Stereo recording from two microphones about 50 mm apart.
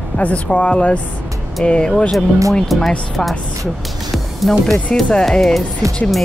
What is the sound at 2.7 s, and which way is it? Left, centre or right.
Speech, centre.